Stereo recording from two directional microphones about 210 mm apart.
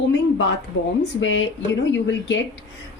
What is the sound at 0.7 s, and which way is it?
Speech, 65° left (ahead or behind).